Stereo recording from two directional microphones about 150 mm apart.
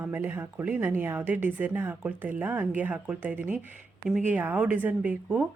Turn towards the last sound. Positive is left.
turn(degrees=-10)  # may be behind; listen again after turning